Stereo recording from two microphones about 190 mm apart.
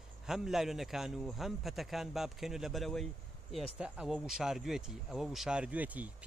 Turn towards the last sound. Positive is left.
turn(degrees=-10)  # may be behind; listen again after turning